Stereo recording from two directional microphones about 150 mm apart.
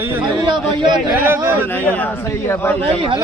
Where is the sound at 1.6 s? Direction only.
15° left (ahead or behind).